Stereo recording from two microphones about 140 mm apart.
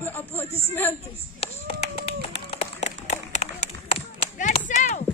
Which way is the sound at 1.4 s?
45° left (ahead or behind).